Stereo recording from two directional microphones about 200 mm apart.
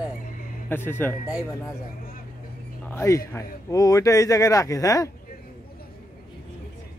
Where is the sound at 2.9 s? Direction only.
15° left (ahead or behind).